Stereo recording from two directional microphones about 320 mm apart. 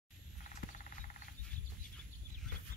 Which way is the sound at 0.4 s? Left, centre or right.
Left.